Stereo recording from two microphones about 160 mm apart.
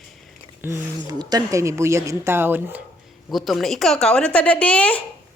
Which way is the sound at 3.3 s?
Centre (ahead or behind).